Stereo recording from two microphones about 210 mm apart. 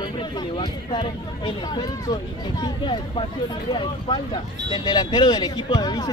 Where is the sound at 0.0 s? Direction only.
20° left (ahead or behind).